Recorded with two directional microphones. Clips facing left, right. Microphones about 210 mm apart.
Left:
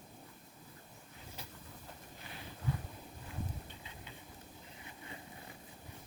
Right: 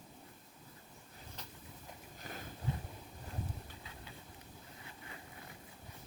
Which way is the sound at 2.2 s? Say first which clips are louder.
Right 6 dB; 45° right (ahead or behind).